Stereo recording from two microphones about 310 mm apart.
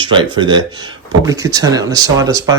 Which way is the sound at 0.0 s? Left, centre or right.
Centre.